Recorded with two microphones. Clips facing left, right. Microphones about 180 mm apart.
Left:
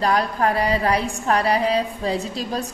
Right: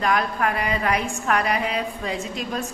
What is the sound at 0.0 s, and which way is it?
A woman's voice, 35° left (ahead or behind).